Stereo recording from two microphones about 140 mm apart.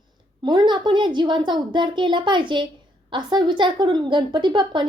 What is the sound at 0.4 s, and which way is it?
A child's voice, 30° right (ahead or behind).